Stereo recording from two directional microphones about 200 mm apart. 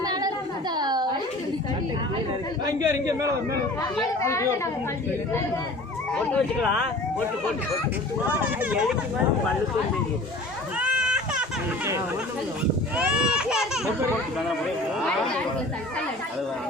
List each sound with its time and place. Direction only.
0.0 s a sound: 20° right (ahead or behind)
2.6 s a man's voice: 15° right (ahead or behind)
4.2 s speech: 15° left (ahead or behind)
6.1 s speech: 5° left (ahead or behind)
8.4 s speech: 5° right (ahead or behind)
10.8 s children playing: 5° right (ahead or behind)
13.0 s speech: 5° right (ahead or behind)